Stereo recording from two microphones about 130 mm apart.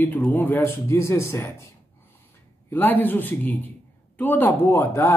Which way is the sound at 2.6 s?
15° left (ahead or behind).